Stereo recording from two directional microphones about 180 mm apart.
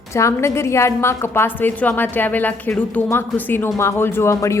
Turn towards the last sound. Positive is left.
turn(degrees=15)  # may be behind; listen again after turning